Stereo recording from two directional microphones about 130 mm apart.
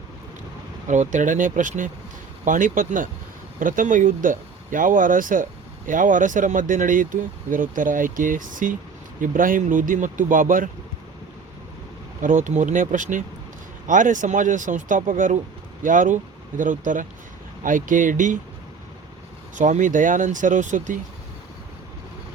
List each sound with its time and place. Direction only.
0.9 s speech: 70° right (ahead or behind)
2.4 s speech: 90° right
12.2 s speech: 75° right (ahead or behind)
19.5 s speech: 75° right (ahead or behind)